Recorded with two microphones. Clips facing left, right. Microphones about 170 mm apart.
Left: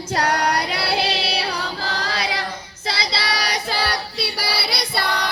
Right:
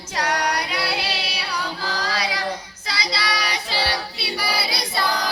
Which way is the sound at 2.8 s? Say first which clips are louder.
Left 2 dB; 30° left (ahead or behind).